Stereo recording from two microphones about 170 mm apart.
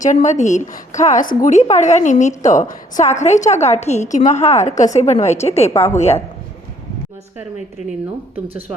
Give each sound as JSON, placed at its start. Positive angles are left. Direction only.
{"t": 0.0, "sound": "a woman's voice", "side_deg": 45}
{"t": 5.7, "sound": "a woman's voice", "side_deg": 15}